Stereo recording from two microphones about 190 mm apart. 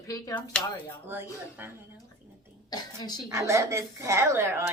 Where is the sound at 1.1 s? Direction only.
10° right (ahead or behind).